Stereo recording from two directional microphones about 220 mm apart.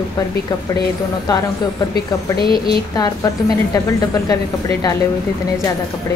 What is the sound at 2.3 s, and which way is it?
Speech, 45° left (ahead or behind).